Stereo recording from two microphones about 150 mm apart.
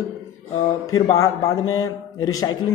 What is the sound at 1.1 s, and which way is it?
Speech, 20° left (ahead or behind).